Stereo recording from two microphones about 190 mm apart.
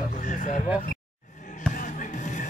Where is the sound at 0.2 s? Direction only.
40° left (ahead or behind).